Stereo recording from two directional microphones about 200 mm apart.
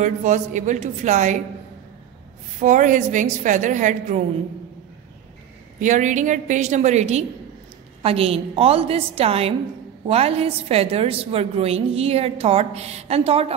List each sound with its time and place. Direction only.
0.0 s a woman's voice: 35° right (ahead or behind)
2.6 s a woman's voice: 40° right (ahead or behind)
5.8 s a woman's voice: 40° right (ahead or behind)